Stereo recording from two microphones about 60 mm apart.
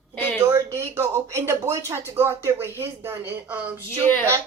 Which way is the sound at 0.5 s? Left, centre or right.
Right.